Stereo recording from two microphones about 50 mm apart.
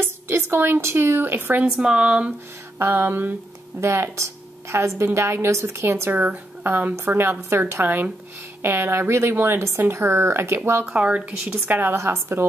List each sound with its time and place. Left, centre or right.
0.0 s speech: right
1.7 s speech: centre
2.8 s a sound: right
3.8 s a woman's voice: right
4.2 s a woman's voice: right
6.1 s a woman's voice: right
8.6 s a woman's voice: right
10.6 s a woman's voice: right
11.0 s speech: right
11.6 s a sound: right
11.9 s a woman's voice: right